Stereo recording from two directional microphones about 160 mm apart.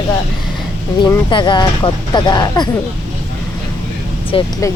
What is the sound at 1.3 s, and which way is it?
Speech, 30° left (ahead or behind).